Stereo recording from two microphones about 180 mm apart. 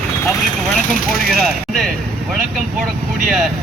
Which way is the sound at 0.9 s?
55° left (ahead or behind).